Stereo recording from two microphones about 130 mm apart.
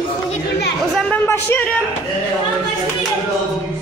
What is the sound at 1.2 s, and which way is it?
Speech, 15° left (ahead or behind).